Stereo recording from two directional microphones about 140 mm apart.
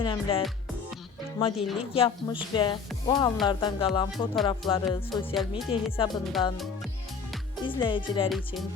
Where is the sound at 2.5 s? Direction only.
35° left (ahead or behind).